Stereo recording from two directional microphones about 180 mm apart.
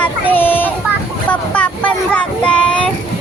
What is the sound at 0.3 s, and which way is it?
Child singing, 10° left (ahead or behind).